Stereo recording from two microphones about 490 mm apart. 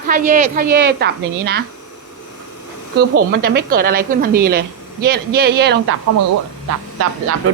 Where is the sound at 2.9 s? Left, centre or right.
Centre.